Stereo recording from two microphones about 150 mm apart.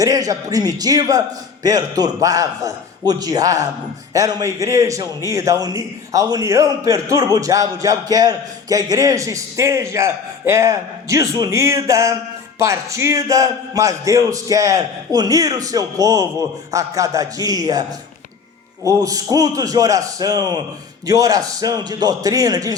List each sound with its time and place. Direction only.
0.0 s a man's voice: 25° right (ahead or behind)
18.9 s a man's voice: 25° right (ahead or behind)